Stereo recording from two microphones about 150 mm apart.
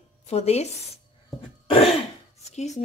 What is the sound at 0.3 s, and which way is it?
Speech, 45° left (ahead or behind).